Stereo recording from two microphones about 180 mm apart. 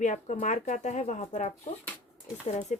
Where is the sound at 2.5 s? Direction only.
40° left (ahead or behind).